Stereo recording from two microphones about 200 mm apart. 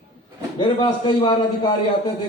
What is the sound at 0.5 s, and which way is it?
Speech, 25° left (ahead or behind).